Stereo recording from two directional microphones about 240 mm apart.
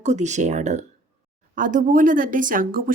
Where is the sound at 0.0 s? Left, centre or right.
Right.